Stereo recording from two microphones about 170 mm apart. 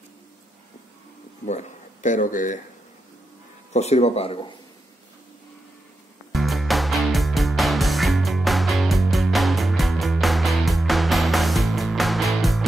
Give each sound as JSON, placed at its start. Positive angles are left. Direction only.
{"t": 1.4, "sound": "speech", "side_deg": 45}
{"t": 3.7, "sound": "speech", "side_deg": 40}
{"t": 6.3, "sound": "music", "side_deg": 0}